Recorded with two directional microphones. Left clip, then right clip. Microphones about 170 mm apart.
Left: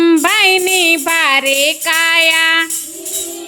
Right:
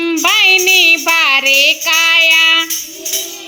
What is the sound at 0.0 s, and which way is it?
Child singing, 40° left (ahead or behind).